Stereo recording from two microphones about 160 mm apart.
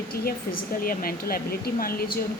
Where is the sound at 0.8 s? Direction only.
65° left (ahead or behind).